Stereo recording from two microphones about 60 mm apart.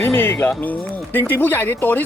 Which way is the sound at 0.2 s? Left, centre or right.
Left.